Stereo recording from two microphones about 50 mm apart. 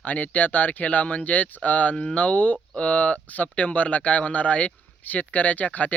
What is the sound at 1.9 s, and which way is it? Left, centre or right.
Speech, centre.